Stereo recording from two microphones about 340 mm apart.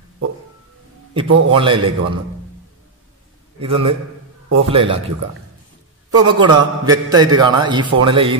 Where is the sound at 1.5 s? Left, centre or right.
Centre.